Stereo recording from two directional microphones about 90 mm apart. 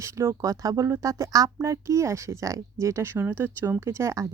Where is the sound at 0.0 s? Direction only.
30° right (ahead or behind).